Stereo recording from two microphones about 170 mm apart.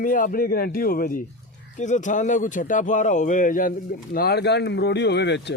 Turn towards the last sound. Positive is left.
turn(degrees=90)